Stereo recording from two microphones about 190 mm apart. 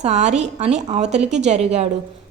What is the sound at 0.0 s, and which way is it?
A woman's voice, 35° right (ahead or behind).